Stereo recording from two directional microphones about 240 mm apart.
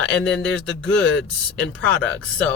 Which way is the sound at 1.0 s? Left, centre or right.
Left.